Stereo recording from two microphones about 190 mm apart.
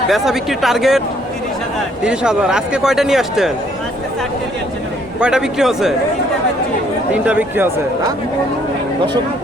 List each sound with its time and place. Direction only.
0.1 s speech: centre (ahead or behind)
2.0 s speech: 5° right (ahead or behind)
5.2 s speech: 5° right (ahead or behind)
7.1 s speech: 10° right (ahead or behind)